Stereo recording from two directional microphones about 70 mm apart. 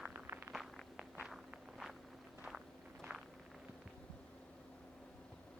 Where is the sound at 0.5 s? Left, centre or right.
Centre.